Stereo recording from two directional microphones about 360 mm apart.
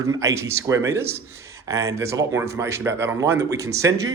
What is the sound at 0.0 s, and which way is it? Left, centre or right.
Speech, centre.